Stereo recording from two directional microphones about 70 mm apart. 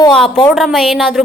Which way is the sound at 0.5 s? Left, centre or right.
Centre.